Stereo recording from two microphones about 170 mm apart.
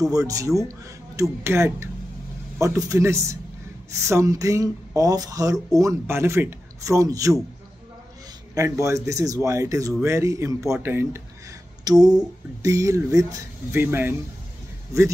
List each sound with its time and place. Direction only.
0.1 s speech: 20° right (ahead or behind)
8.5 s speech: 20° right (ahead or behind)